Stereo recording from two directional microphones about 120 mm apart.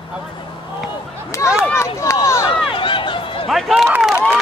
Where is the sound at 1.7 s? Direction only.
25° left (ahead or behind).